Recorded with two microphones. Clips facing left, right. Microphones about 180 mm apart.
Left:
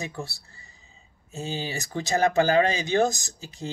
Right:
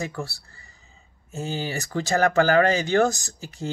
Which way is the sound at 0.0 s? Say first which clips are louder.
Right 3 dB; 20° left (ahead or behind).